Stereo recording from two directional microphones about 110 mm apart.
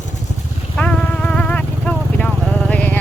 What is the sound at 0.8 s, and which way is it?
Vehicle, 10° left (ahead or behind).